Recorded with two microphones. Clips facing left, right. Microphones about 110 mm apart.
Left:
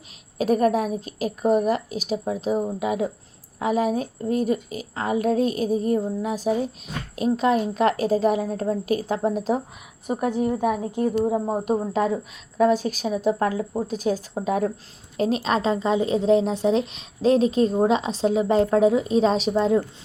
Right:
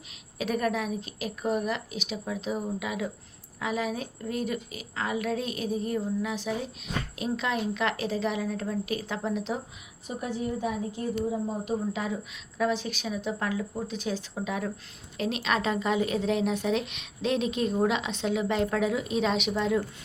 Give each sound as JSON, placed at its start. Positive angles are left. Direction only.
{"t": 0.3, "sound": "a woman's voice", "side_deg": 40}